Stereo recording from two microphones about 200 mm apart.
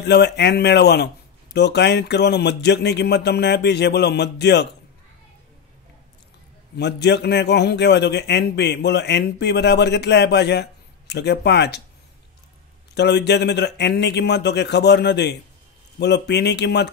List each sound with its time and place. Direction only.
0.0 s a man's voice: 55° left (ahead or behind)
6.8 s a man's voice: 60° left (ahead or behind)
12.9 s a man's voice: 60° left (ahead or behind)